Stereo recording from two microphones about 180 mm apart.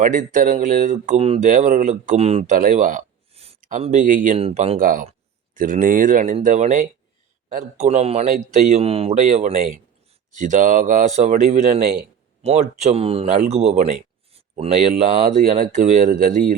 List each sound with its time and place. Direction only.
0.0 s speech: 45° right (ahead or behind)
1.5 s speech: 45° right (ahead or behind)
3.3 s a sound: 35° right (ahead or behind)
3.6 s speech: 40° right (ahead or behind)
4.4 s speech: 35° right (ahead or behind)
4.8 s speech: 50° right (ahead or behind)